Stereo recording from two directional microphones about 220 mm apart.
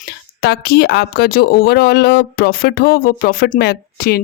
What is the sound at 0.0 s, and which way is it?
Speech, 45° left (ahead or behind).